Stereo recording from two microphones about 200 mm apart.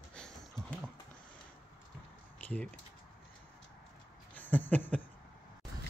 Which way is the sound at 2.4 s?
5° left (ahead or behind).